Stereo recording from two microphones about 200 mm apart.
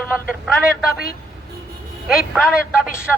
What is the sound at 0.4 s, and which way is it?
Speech, 5° right (ahead or behind).